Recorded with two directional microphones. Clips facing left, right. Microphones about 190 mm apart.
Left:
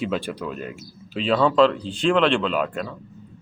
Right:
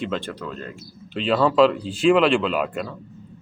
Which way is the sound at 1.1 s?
Centre (ahead or behind).